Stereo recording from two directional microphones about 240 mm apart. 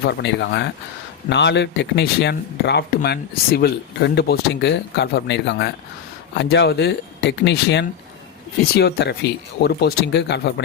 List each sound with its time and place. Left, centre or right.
0.1 s speech: left